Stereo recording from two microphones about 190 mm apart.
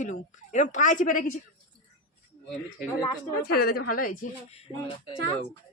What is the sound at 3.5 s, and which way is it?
Speech, 55° left (ahead or behind).